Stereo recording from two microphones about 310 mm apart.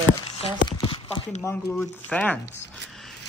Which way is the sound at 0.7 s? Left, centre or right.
Centre.